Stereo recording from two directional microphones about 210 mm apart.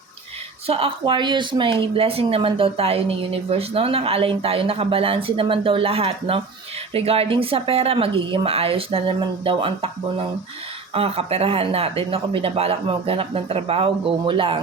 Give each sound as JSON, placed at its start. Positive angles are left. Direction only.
{"t": 0.7, "sound": "speech", "side_deg": -25}
{"t": 10.9, "sound": "speech", "side_deg": -30}